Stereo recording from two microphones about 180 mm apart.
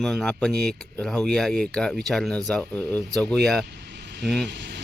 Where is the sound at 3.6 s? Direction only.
70° right (ahead or behind).